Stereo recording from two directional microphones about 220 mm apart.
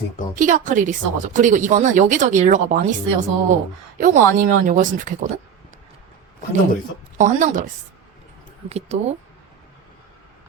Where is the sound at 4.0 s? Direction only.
35° right (ahead or behind).